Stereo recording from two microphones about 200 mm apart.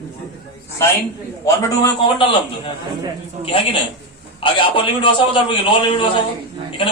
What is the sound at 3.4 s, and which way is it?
A man's voice, 25° left (ahead or behind).